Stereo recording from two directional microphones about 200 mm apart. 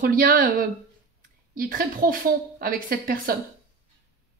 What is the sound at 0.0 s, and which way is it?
A woman's voice, 45° right (ahead or behind).